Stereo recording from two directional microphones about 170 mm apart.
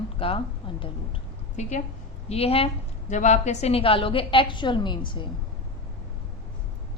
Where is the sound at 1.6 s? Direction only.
45° left (ahead or behind); by 5.3 s 30° left (ahead or behind).